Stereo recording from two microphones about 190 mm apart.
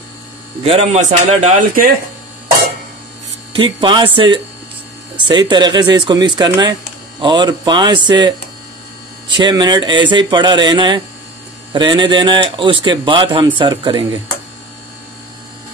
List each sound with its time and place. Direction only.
0.7 s a man's voice: 30° right (ahead or behind)
3.5 s speech: 25° right (ahead or behind)